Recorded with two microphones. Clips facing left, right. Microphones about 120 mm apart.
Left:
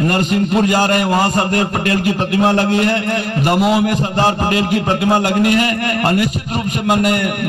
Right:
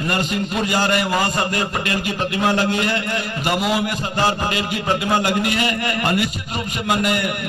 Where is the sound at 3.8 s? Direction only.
50° left (ahead or behind).